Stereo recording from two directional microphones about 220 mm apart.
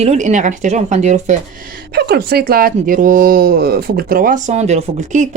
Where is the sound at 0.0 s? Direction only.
30° right (ahead or behind).